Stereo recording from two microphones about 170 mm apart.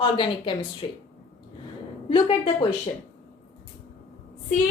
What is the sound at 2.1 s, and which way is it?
Speech, 30° left (ahead or behind).